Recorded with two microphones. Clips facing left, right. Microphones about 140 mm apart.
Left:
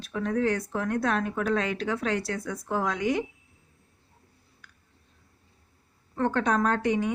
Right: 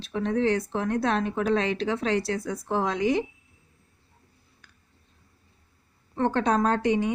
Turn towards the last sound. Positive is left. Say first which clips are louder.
# right 2 dB
turn(degrees=-30)  # may be behind; listen again after turning